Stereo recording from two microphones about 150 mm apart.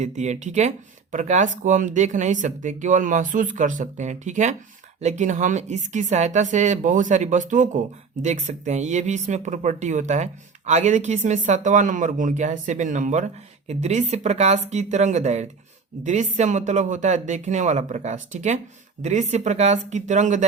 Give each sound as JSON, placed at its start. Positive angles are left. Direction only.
{"t": 0.0, "sound": "speech", "side_deg": -50}